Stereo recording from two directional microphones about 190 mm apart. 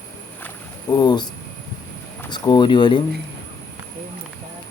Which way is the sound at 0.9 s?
20° left (ahead or behind).